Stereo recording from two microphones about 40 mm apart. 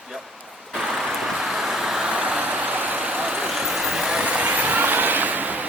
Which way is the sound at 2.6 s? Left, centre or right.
Right.